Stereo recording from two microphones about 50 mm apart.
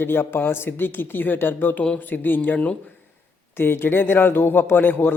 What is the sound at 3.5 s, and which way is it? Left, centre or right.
Speech, left.